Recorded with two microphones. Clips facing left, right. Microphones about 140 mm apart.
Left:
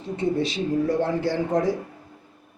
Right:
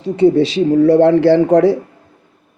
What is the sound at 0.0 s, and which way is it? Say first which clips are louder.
A man's voice: right 13 dB; 85° right.